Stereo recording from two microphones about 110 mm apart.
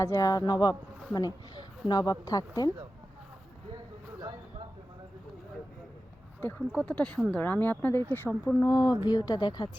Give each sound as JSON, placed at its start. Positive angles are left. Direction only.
{"t": 0.0, "sound": "speech", "side_deg": 30}
{"t": 6.6, "sound": "speech", "side_deg": 0}
{"t": 6.8, "sound": "speech", "side_deg": 10}
{"t": 8.6, "sound": "speech", "side_deg": 40}